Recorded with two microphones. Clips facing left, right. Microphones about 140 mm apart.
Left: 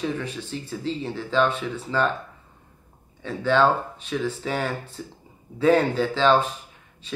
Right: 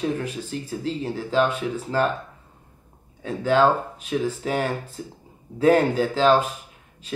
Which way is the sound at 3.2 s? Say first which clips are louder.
Right 1 dB; 40° right (ahead or behind).